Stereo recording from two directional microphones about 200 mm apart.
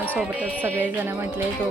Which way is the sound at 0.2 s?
10° right (ahead or behind).